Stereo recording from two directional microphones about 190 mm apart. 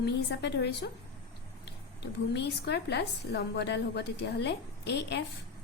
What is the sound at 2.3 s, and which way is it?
A woman's voice, 60° left (ahead or behind).